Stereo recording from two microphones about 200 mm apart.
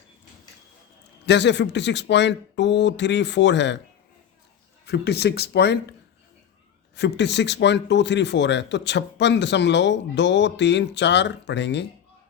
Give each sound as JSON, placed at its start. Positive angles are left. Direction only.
{"t": 1.2, "sound": "a man's voice", "side_deg": 60}
{"t": 4.9, "sound": "a man's voice", "side_deg": 55}
{"t": 6.9, "sound": "a man's voice", "side_deg": 60}